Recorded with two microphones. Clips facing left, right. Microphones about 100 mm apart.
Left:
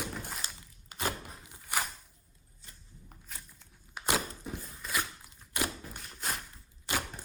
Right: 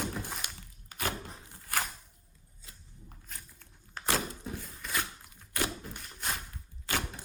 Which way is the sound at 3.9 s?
15° left (ahead or behind).